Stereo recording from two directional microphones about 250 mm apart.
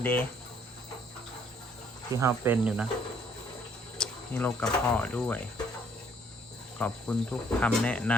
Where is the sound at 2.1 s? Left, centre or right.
Centre.